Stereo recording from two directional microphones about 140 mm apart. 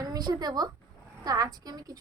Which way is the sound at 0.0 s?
30° right (ahead or behind).